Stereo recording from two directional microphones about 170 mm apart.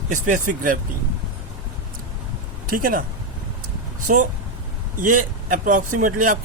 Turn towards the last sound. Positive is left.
turn(degrees=-50)  # may be behind; listen again after turning